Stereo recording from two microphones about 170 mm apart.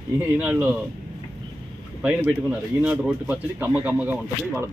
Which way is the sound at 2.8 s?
5° right (ahead or behind).